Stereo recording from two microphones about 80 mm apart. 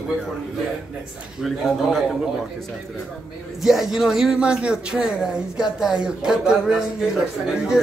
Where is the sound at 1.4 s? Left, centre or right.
Centre.